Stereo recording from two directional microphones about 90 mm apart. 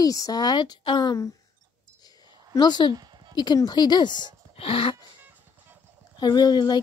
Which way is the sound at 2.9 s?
55° right (ahead or behind).